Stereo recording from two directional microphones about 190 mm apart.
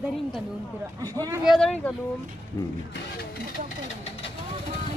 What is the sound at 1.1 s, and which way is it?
Speech, 20° right (ahead or behind).